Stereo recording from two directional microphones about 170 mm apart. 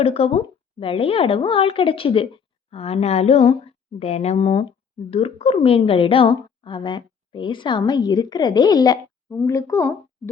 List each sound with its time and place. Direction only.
0.0 s a woman's voice: 35° left (ahead or behind); by 9.9 s 15° left (ahead or behind)